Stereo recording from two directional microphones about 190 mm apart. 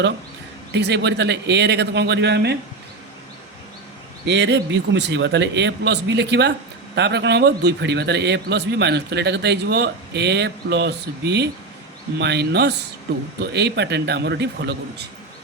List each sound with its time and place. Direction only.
0.7 s a man's voice: 65° right (ahead or behind)
4.3 s a man's voice: 65° right (ahead or behind)